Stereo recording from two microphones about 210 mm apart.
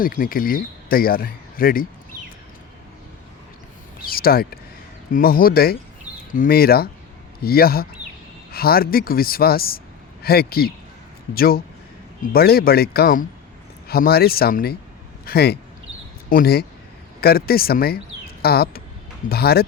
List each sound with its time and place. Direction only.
0.0 s speech: 40° left (ahead or behind)
4.0 s a sound: 45° left (ahead or behind)
5.1 s speech: 45° left (ahead or behind)